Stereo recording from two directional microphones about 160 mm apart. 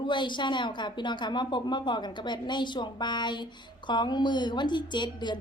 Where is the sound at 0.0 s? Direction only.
30° left (ahead or behind).